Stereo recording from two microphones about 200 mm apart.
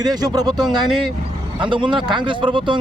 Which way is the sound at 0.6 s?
Centre (ahead or behind).